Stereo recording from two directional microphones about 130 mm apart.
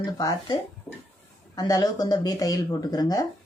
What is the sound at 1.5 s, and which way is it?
Speech, 30° left (ahead or behind).